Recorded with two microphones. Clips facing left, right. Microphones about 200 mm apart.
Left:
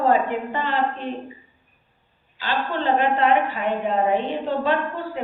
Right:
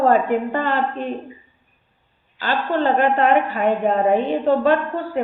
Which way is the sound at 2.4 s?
50° right (ahead or behind).